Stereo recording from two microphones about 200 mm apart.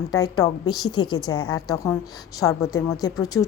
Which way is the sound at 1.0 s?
90° left.